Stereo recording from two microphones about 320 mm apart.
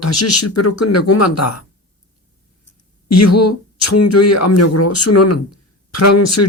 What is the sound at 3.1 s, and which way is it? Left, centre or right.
Speech, left.